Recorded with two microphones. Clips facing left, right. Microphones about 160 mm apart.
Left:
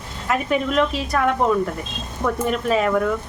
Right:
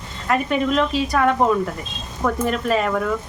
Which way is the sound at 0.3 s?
Centre (ahead or behind).